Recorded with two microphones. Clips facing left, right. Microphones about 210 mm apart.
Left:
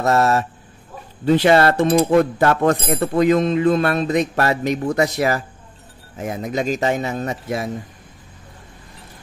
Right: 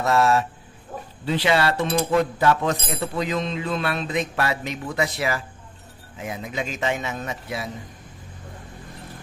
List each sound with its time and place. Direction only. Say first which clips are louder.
0.0 s speech: left 2 dB; 40° left (ahead or behind)